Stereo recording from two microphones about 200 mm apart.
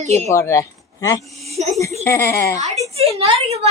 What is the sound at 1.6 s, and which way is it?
Speech, 35° right (ahead or behind).